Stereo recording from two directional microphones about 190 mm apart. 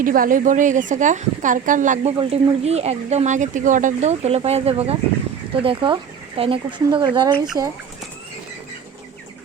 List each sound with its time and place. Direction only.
0.0 s speech: 45° right (ahead or behind); by 7.3 s 25° right (ahead or behind)